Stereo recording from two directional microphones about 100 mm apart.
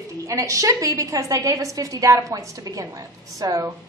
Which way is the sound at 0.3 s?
35° right (ahead or behind).